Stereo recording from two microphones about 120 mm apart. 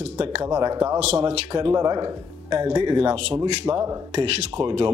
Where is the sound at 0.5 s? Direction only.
30° right (ahead or behind).